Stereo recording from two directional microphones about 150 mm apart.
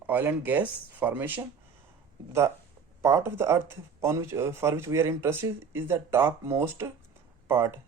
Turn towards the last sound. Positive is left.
turn(degrees=-15)  # may be behind; listen again after turning